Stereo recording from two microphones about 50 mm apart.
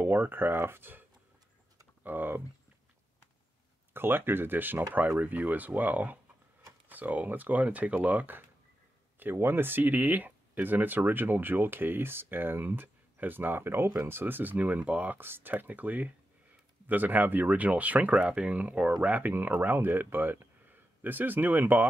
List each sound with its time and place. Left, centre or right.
0.0 s speech: right
2.0 s speech: right
3.9 s speech: right
15.1 s speech: right
15.5 s speech: right